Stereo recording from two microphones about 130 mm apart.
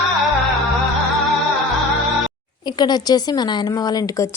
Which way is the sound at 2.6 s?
35° left (ahead or behind).